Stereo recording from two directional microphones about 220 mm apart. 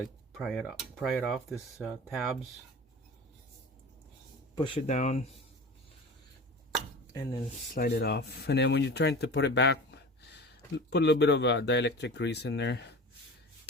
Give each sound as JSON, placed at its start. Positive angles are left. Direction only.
{"t": 0.3, "sound": "speech", "side_deg": 0}
{"t": 4.5, "sound": "speech", "side_deg": 20}
{"t": 7.7, "sound": "speech", "side_deg": 45}